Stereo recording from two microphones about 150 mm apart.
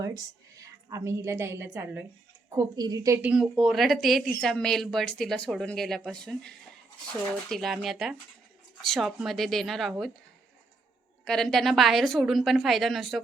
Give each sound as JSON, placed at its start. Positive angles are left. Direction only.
{"t": 0.0, "sound": "a woman's voice", "side_deg": -25}
{"t": 2.6, "sound": "a woman's voice", "side_deg": -25}
{"t": 3.2, "sound": "speech", "side_deg": -5}
{"t": 11.3, "sound": "speech", "side_deg": 5}